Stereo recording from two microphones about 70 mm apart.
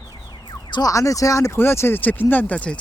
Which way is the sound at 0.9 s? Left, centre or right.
Left.